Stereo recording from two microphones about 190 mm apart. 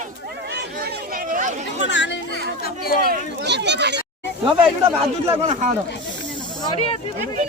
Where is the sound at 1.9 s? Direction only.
70° left (ahead or behind).